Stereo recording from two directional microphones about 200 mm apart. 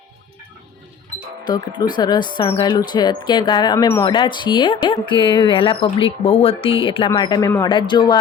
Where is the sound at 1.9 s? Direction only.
20° left (ahead or behind).